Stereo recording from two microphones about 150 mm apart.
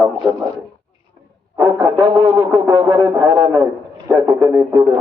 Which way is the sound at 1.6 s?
20° right (ahead or behind).